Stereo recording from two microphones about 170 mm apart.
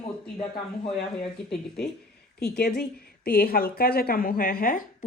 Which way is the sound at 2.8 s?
60° left (ahead or behind).